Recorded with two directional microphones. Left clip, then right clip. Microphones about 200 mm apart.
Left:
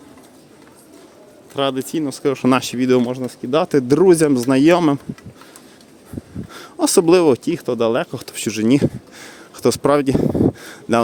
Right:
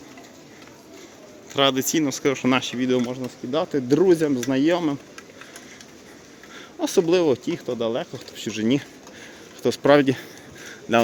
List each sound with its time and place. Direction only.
1.5 s speech: 10° left (ahead or behind); by 4.9 s 50° left (ahead or behind)
6.5 s speech: 35° left (ahead or behind)
10.7 s a sound: 30° left (ahead or behind)